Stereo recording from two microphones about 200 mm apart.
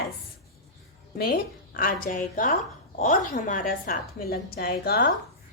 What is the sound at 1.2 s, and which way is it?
A woman's voice, 50° left (ahead or behind).